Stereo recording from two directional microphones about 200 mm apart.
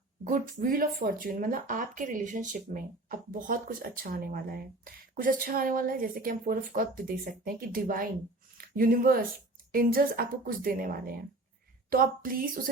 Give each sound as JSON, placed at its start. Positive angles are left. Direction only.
{"t": 0.3, "sound": "speech", "side_deg": -45}